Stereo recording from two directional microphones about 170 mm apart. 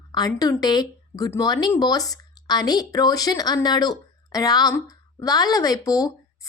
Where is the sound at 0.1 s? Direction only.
20° left (ahead or behind).